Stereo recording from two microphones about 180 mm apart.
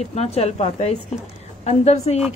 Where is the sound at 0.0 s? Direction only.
35° left (ahead or behind).